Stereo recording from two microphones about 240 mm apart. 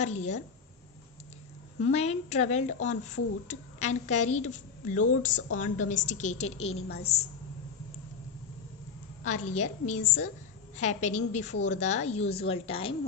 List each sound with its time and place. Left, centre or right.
0.0 s a woman's voice: left
1.8 s a woman's voice: left
6.8 s a woman's voice: left
9.2 s a woman's voice: left